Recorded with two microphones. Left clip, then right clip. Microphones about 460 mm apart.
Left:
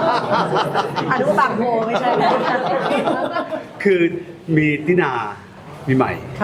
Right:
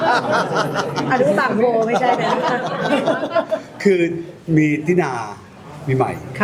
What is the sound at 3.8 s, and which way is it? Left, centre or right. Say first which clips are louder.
Speech: left 1 dB; centre.